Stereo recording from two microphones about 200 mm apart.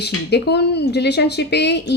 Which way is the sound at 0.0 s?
55° left (ahead or behind).